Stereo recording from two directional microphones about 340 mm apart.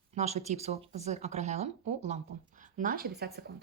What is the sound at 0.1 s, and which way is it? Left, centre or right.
Speech, centre.